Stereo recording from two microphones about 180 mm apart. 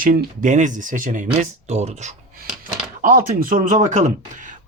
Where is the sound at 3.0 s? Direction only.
50° right (ahead or behind).